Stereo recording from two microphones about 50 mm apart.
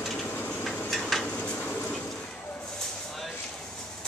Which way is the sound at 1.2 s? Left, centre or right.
Left.